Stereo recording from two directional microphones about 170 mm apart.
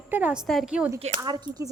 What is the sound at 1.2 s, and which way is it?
Speech, 25° right (ahead or behind).